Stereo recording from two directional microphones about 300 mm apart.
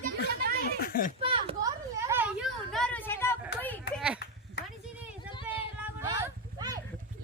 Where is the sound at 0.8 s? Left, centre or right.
Left.